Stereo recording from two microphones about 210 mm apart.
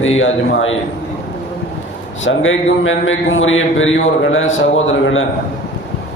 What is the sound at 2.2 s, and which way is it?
A man's voice, 65° left (ahead or behind).